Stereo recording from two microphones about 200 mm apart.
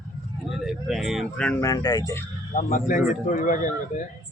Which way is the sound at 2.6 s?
40° left (ahead or behind).